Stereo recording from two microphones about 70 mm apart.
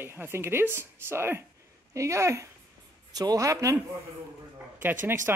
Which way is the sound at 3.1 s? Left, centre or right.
Right.